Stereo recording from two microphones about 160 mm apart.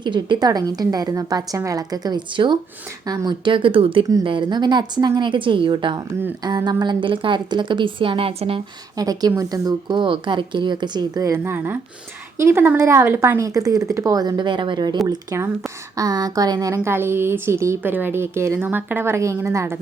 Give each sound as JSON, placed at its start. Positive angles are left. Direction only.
{"t": 0.0, "sound": "a woman's voice", "side_deg": -30}
{"t": 9.0, "sound": "speech", "side_deg": -25}